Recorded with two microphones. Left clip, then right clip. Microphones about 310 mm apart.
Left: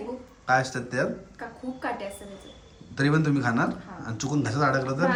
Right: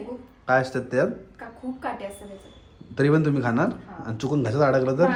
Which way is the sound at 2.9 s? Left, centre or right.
Centre.